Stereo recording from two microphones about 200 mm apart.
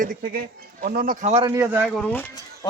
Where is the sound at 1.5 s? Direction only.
15° right (ahead or behind).